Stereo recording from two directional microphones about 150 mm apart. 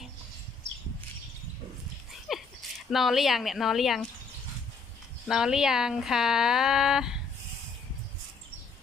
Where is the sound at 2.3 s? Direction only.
Centre (ahead or behind).